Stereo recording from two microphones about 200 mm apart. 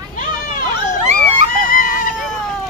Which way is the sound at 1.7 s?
45° left (ahead or behind).